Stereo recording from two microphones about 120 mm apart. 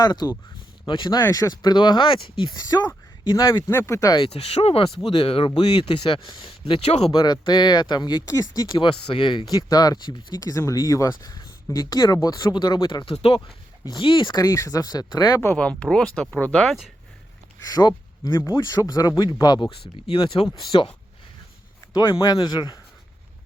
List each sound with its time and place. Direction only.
0.0 s speech: 35° left (ahead or behind)
1.2 s speech: 25° left (ahead or behind)
1.7 s speech: 40° left (ahead or behind)
2.6 s speech: 30° left (ahead or behind)
4.3 s speech: 60° left (ahead or behind)
7.2 s speech: 40° left (ahead or behind)
8.5 s speech: 40° left (ahead or behind)
13.1 s speech: 55° left (ahead or behind)
13.8 s speech: 40° left (ahead or behind)
14.4 s speech: 25° left (ahead or behind)
15.4 s speech: 15° left (ahead or behind)
17.6 s speech: 30° left (ahead or behind)
20.1 s speech: 50° left (ahead or behind)
21.9 s speech: 35° left (ahead or behind)